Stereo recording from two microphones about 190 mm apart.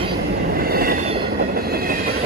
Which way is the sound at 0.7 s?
50° right (ahead or behind).